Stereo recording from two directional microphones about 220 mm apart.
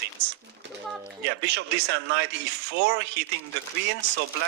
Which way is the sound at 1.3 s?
50° right (ahead or behind).